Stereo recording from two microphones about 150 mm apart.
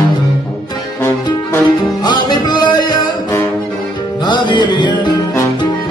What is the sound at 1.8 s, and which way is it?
Music, 30° left (ahead or behind).